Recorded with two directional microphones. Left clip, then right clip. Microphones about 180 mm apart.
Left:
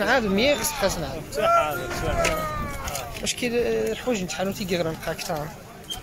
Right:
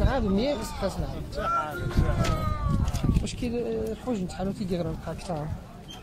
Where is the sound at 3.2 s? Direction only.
5° right (ahead or behind).